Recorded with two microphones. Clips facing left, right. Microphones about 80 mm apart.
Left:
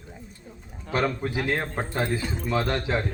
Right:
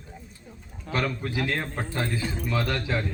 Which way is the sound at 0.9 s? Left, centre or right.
Left.